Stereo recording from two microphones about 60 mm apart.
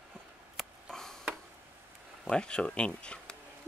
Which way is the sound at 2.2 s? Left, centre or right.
Centre.